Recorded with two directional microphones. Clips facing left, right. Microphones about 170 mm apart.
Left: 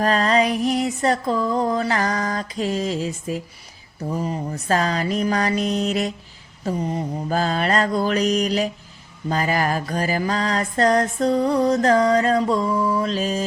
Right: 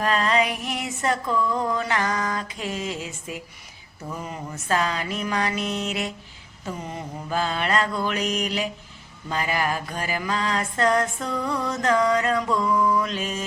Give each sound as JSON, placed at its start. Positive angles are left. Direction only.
{"t": 0.0, "sound": "music", "side_deg": 40}